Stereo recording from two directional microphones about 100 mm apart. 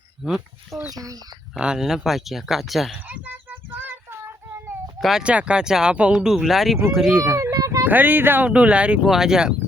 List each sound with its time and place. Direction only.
0.3 s speech: 5° right (ahead or behind)
0.9 s speech: 40° right (ahead or behind)
1.5 s speech: 10° right (ahead or behind)
3.1 s a sound: 20° right (ahead or behind)
4.9 s speech: centre (ahead or behind)
5.2 s speech: 10° right (ahead or behind)
7.5 s a sound: 35° right (ahead or behind)
7.9 s speech: 20° right (ahead or behind)